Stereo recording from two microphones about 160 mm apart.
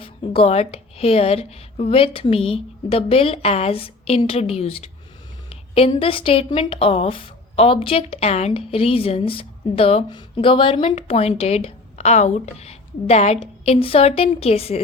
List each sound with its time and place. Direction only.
0.0 s a woman's voice: 40° left (ahead or behind)